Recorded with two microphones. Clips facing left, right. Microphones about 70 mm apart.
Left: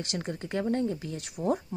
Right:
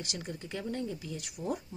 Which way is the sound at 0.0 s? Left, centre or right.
Left.